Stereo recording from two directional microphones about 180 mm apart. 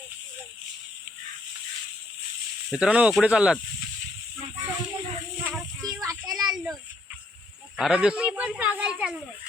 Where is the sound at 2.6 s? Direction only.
5° right (ahead or behind).